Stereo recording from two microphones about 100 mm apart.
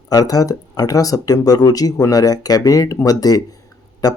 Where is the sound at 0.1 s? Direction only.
40° left (ahead or behind).